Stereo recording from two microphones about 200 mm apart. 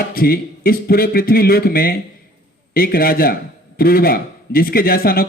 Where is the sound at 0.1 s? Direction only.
50° left (ahead or behind).